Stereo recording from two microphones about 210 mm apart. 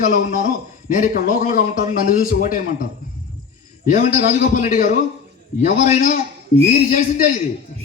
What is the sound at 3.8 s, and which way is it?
A man's voice, 40° left (ahead or behind).